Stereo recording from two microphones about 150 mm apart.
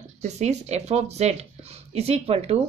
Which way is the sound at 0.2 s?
45° right (ahead or behind).